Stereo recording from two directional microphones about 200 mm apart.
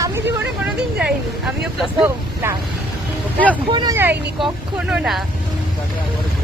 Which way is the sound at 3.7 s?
20° right (ahead or behind).